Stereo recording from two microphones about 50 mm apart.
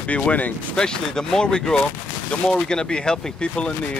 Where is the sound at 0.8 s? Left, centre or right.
Centre.